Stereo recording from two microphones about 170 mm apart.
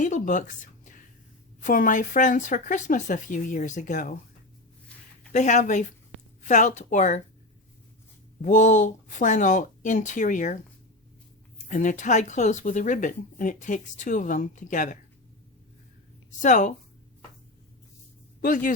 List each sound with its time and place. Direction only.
0.0 s a sound: 50° left (ahead or behind)
1.6 s speech: 50° left (ahead or behind)
5.3 s speech: 45° left (ahead or behind)
8.4 s speech: 50° left (ahead or behind)
16.4 s speech: 50° left (ahead or behind)
18.3 s speech: 50° left (ahead or behind)